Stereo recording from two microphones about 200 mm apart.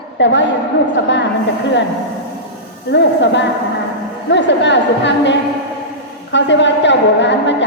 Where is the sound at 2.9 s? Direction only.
65° left (ahead or behind).